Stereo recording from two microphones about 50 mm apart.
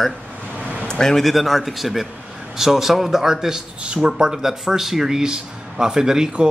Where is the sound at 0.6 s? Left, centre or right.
Right.